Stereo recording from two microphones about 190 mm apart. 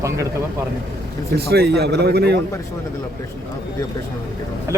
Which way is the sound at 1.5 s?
60° right (ahead or behind).